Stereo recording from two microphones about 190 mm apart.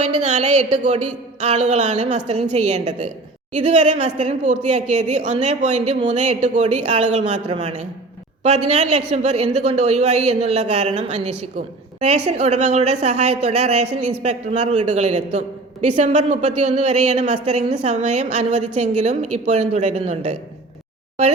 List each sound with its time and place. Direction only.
0.0 s a woman's voice: 35° right (ahead or behind)